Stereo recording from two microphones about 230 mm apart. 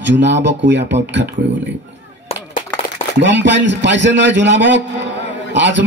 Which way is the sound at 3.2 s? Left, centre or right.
Right.